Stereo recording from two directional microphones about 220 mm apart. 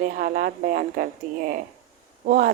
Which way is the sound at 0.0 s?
40° right (ahead or behind).